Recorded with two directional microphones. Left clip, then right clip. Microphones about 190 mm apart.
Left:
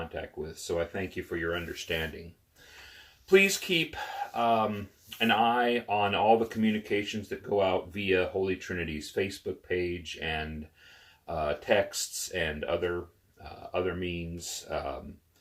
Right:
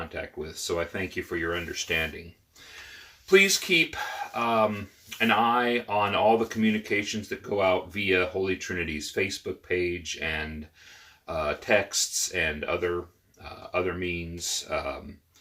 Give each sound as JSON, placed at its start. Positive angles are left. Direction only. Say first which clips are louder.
{"t": 0.1, "sound": "speech", "louder": "right 2 dB", "side_deg": -20}
{"t": 3.2, "sound": "speech", "louder": "right 3 dB", "side_deg": -15}